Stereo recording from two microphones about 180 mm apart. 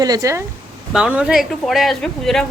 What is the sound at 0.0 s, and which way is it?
Speech, 20° right (ahead or behind).